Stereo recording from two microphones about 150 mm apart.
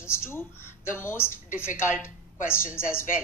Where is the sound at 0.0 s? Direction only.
15° left (ahead or behind).